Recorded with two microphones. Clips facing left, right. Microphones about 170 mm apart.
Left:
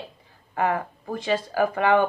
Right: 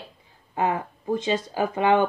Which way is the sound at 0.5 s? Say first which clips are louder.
Left 1 dB; 20° right (ahead or behind).